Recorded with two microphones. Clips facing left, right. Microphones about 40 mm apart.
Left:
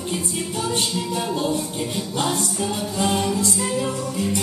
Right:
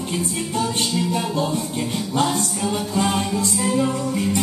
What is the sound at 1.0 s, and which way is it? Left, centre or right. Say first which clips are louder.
Music: right 4 dB; right.